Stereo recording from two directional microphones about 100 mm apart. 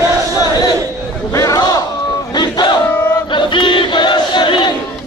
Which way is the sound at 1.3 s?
35° left (ahead or behind).